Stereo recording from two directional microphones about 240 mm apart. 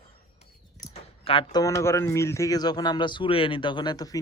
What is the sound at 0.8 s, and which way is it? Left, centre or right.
Speech, left.